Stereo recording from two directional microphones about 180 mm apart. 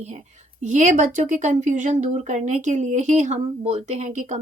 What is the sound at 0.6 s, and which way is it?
A woman's voice, 40° right (ahead or behind).